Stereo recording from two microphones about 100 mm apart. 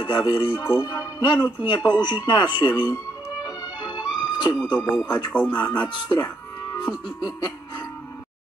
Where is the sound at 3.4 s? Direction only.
40° left (ahead or behind).